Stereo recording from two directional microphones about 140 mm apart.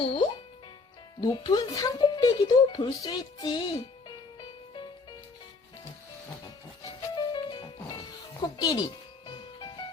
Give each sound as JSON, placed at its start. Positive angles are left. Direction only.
{"t": 0.0, "sound": "speech", "side_deg": 40}
{"t": 4.4, "sound": "music", "side_deg": 35}
{"t": 7.3, "sound": "music", "side_deg": 35}
{"t": 8.4, "sound": "speech", "side_deg": 30}
{"t": 9.2, "sound": "music", "side_deg": 30}